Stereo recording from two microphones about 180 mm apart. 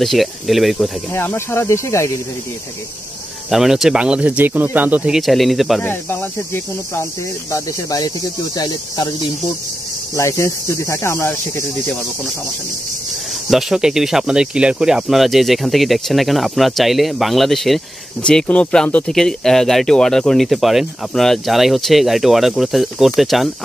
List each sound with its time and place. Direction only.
0.0 s speech: centre (ahead or behind)
1.1 s speech: 15° left (ahead or behind)
3.4 s speech: centre (ahead or behind)
5.8 s speech: 10° left (ahead or behind)
13.5 s speech: centre (ahead or behind)